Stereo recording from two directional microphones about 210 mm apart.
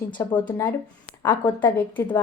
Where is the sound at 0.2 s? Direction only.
10° left (ahead or behind).